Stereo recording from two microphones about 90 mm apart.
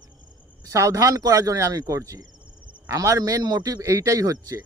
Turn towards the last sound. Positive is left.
turn(degrees=-40)  # may be behind; listen again after turning